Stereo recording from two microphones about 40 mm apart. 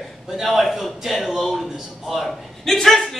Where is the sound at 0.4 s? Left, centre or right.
Centre.